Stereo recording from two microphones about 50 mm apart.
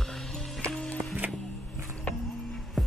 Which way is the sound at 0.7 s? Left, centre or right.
Left.